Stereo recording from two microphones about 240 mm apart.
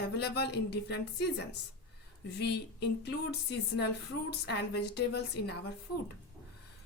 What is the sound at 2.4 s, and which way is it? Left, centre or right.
A woman's voice, left.